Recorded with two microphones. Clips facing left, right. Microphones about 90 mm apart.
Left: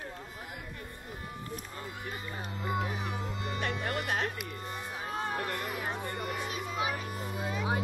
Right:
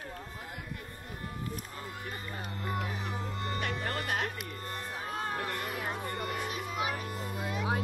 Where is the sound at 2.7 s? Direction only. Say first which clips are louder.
Left 3 dB; 15° left (ahead or behind).